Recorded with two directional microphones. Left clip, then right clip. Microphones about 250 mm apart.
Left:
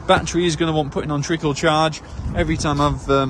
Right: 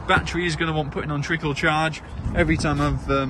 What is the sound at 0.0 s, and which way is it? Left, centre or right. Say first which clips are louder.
A man's voice: left 4 dB; centre.